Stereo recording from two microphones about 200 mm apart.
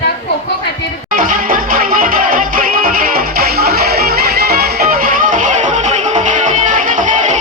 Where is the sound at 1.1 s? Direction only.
45° right (ahead or behind).